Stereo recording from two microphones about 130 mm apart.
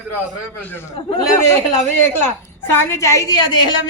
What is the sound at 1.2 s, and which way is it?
Speech, 25° left (ahead or behind).